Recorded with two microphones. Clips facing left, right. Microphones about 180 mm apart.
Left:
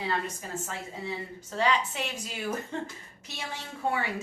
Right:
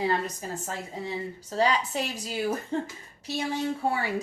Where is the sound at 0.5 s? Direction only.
35° right (ahead or behind).